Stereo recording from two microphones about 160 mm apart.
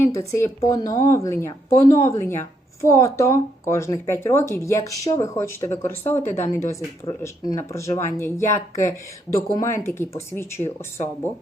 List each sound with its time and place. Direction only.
0.0 s speech: 15° left (ahead or behind)